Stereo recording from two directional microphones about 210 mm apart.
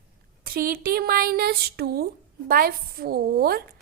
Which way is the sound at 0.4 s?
45° right (ahead or behind).